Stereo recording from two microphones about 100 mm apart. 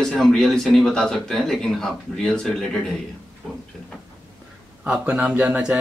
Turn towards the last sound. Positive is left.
turn(degrees=-10)  # may be behind; listen again after turning